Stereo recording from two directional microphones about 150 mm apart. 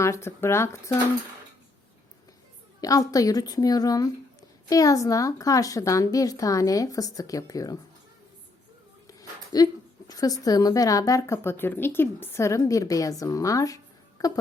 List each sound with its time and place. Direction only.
0.0 s speech: 20° left (ahead or behind)
2.8 s a woman's voice: 25° left (ahead or behind)
9.0 s a sound: 25° left (ahead or behind)
10.1 s a woman's voice: 25° left (ahead or behind)